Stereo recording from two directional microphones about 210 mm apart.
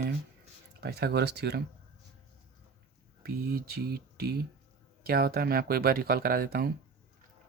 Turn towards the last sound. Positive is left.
turn(degrees=-45)  # may be behind; listen again after turning